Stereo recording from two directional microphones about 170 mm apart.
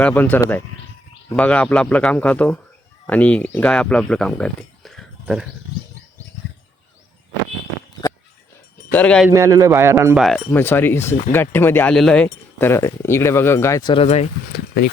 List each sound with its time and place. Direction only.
0.0 s speech: 10° left (ahead or behind)
8.9 s speech: 10° left (ahead or behind)
9.3 s a man's voice: 20° right (ahead or behind)
10.2 s speech: centre (ahead or behind)
10.5 s speech: 10° left (ahead or behind)
13.9 s speech: 35° left (ahead or behind)